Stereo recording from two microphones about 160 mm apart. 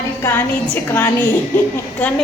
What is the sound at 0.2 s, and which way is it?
A woman's voice, 15° left (ahead or behind).